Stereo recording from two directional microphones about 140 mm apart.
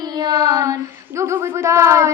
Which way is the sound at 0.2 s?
30° right (ahead or behind).